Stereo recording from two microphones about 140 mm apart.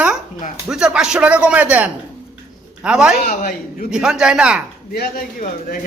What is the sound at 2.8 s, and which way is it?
A man's voice, 5° right (ahead or behind).